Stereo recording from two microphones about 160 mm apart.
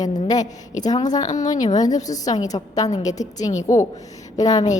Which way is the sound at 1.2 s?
50° left (ahead or behind).